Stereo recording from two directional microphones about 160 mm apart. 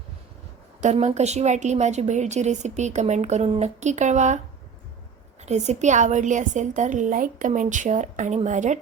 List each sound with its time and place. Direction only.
0.8 s a woman's voice: 45° right (ahead or behind)
5.4 s a woman's voice: 45° right (ahead or behind)